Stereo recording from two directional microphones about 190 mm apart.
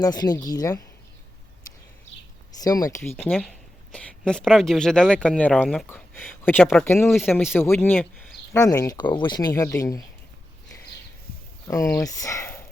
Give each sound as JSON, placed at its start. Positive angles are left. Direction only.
{"t": 0.0, "sound": "speech", "side_deg": 20}
{"t": 2.6, "sound": "speech", "side_deg": 20}
{"t": 3.2, "sound": "speech", "side_deg": 0}
{"t": 11.7, "sound": "speech", "side_deg": 15}